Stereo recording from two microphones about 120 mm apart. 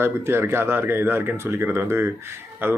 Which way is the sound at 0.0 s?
20° right (ahead or behind).